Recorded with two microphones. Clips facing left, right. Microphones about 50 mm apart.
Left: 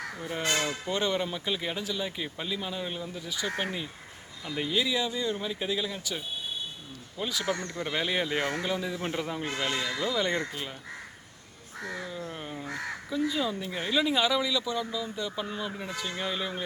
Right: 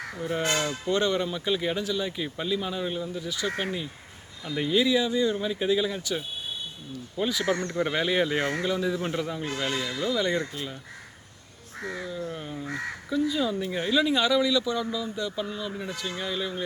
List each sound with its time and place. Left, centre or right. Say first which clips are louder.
0.2 s speech: right 3 dB; centre
12.0 s speech: right 3 dB; centre